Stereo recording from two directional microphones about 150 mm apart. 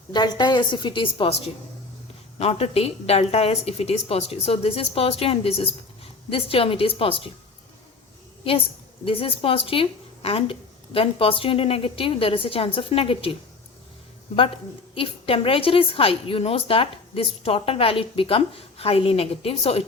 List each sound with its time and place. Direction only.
0.1 s a woman's voice: 30° left (ahead or behind)
2.4 s a woman's voice: 40° left (ahead or behind)
9.0 s a woman's voice: 40° left (ahead or behind)
14.9 s a woman's voice: 35° left (ahead or behind)